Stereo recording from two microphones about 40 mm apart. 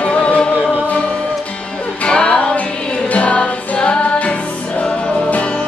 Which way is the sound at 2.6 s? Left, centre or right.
Left.